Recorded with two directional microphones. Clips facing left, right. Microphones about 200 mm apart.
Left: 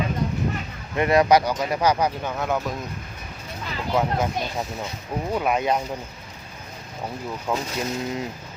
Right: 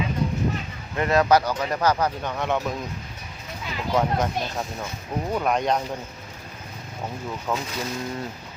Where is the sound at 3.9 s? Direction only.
5° left (ahead or behind).